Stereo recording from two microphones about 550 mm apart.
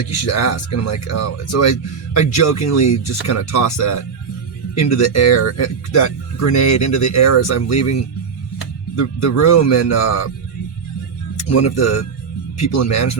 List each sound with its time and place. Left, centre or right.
0.3 s speech: left
11.4 s speech: left